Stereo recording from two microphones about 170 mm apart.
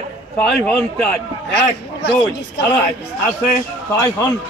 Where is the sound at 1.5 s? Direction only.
90° left.